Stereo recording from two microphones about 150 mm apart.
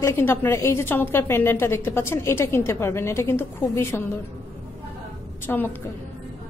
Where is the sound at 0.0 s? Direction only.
15° left (ahead or behind).